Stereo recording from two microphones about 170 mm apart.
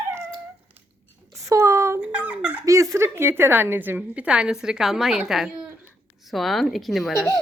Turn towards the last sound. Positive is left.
turn(degrees=0)  # may be behind; listen again after turning